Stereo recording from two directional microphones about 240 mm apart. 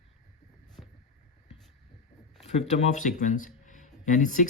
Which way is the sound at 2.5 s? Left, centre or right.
Left.